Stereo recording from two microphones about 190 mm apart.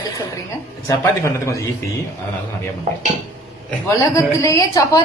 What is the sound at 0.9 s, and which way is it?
Speech, 15° left (ahead or behind).